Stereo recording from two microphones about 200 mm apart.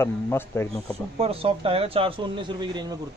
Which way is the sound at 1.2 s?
30° right (ahead or behind).